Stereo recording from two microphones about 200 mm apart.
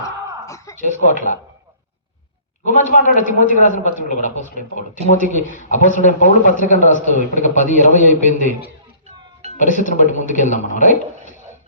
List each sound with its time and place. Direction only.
0.4 s a sound: 15° left (ahead or behind)
0.8 s speech: 40° left (ahead or behind)
2.6 s speech: 40° left (ahead or behind)